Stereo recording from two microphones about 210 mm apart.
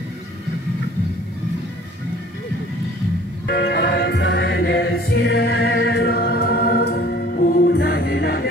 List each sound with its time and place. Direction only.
3.4 s music: 50° left (ahead or behind)